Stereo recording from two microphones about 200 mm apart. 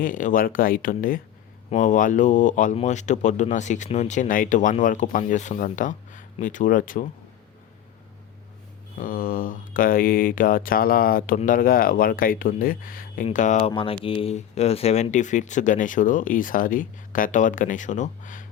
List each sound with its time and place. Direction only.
0.0 s speech: 40° left (ahead or behind)
9.0 s speech: 45° left (ahead or behind)
13.6 s speech: 25° left (ahead or behind)